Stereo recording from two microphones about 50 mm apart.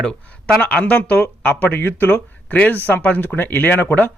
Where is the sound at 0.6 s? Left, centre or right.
Left.